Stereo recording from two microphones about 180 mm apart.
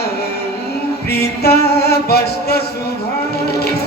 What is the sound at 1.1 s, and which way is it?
Music, 65° left (ahead or behind).